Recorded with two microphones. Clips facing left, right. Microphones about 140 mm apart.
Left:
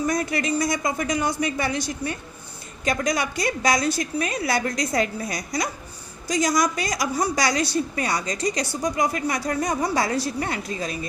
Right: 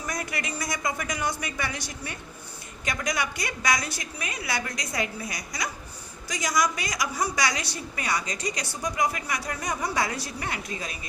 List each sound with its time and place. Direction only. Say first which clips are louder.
0.0 s a woman's voice: left 9 dB; 30° left (ahead or behind)